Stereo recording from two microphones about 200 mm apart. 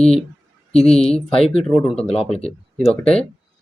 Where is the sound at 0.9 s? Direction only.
30° left (ahead or behind).